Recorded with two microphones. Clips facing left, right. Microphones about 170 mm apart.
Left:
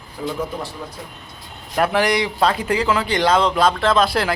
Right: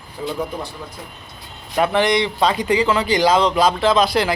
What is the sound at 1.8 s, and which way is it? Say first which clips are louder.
Speech: right 1 dB; 5° left (ahead or behind).